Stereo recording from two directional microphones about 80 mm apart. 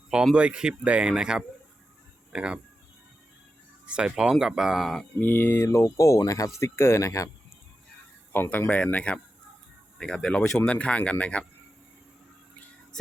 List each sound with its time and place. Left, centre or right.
0.3 s speech: centre
3.8 s speech: centre
5.2 s speech: left
6.6 s speech: left
8.3 s speech: left